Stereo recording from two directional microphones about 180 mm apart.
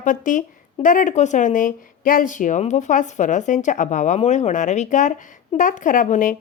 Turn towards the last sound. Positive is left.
turn(degrees=45)  # may be behind; listen again after turning